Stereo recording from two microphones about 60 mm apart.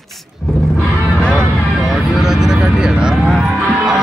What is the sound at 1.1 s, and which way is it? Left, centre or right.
Vehicle, centre.